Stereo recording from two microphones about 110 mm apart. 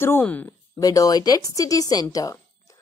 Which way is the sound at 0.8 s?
35° left (ahead or behind).